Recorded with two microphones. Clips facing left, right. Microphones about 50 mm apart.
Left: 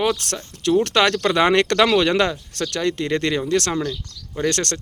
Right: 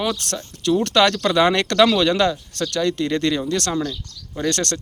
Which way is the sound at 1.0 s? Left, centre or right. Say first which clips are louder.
Right 1 dB; centre.